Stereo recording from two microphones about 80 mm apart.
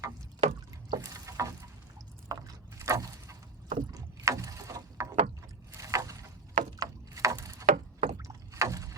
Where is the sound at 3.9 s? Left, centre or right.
Right.